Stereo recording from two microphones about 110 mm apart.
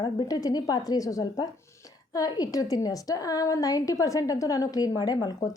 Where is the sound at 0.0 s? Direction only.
40° left (ahead or behind).